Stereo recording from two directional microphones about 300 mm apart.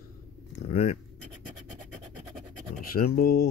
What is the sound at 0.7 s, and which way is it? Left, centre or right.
Speech, left.